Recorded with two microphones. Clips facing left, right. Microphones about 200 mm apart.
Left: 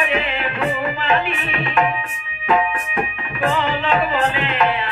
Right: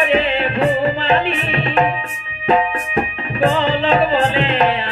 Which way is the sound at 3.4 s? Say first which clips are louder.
Right 4 dB; 30° right (ahead or behind).